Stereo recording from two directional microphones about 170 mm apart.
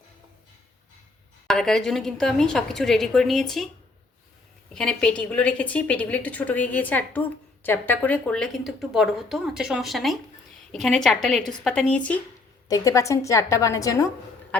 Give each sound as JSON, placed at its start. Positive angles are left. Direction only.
{"t": 1.5, "sound": "a woman's voice", "side_deg": 5}
{"t": 4.7, "sound": "a woman's voice", "side_deg": 5}
{"t": 12.6, "sound": "a woman's voice", "side_deg": 20}